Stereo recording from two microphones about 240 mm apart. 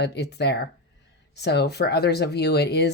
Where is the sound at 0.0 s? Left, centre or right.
Left.